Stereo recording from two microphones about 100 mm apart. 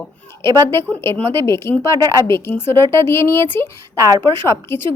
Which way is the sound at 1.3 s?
25° left (ahead or behind).